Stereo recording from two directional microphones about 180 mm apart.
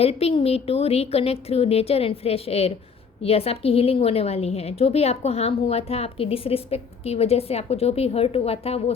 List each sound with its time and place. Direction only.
0.0 s a woman's voice: 35° left (ahead or behind)